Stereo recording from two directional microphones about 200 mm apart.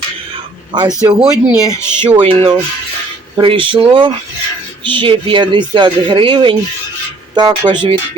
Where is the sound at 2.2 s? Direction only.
25° right (ahead or behind).